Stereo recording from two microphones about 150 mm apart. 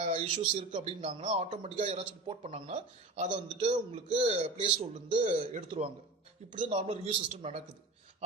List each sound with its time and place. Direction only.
0.0 s a man's voice: 40° right (ahead or behind)